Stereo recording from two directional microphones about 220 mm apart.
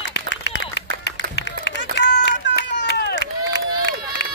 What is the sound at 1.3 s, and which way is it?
Run, 50° left (ahead or behind).